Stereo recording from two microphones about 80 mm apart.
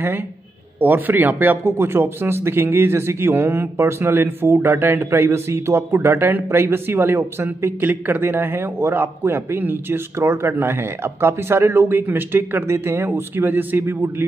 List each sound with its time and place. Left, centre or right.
0.7 s speech: right